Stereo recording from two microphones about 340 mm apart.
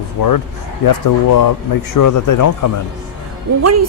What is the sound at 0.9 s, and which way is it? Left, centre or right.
A man's voice, left.